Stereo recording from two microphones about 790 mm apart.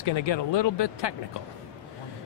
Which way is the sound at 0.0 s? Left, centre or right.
Left.